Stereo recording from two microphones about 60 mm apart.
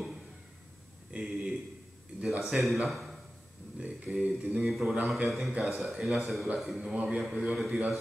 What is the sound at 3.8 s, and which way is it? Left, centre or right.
Speech, centre.